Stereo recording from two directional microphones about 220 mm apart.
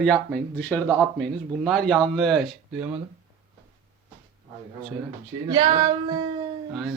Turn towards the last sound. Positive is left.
turn(degrees=0)  # may be behind; listen again after turning